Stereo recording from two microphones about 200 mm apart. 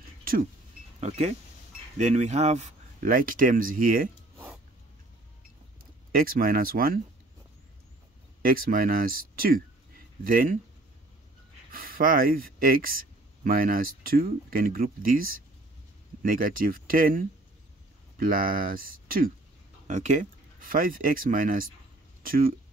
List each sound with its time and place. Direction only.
1.0 s speech: 35° right (ahead or behind)
6.1 s speech: 45° right (ahead or behind)
8.4 s speech: 45° right (ahead or behind)
11.7 s speech: 45° right (ahead or behind)